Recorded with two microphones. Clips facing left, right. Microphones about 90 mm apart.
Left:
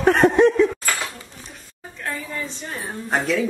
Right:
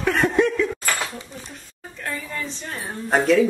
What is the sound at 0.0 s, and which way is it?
Laughter, 45° left (ahead or behind).